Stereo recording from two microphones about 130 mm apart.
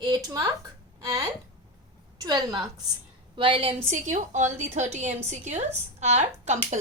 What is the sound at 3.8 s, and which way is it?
A woman's voice, 65° right (ahead or behind).